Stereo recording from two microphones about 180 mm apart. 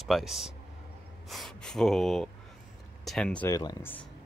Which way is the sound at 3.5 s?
20° left (ahead or behind).